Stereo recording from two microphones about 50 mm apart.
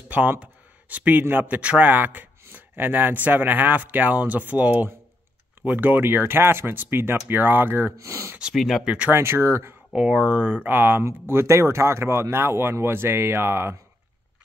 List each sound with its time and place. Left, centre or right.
0.4 s a sound: right
1.3 s speech: right
8.0 s speech: right
8.5 s speech: centre
8.8 s speech: right
9.1 s speech: right
9.9 s speech: centre
10.4 s speech: right
11.4 s speech: right